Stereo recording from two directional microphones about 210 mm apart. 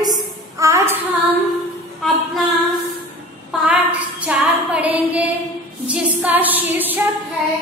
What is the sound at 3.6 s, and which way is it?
Female singing, 5° right (ahead or behind).